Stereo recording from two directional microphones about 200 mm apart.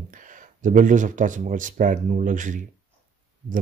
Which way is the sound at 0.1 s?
40° right (ahead or behind).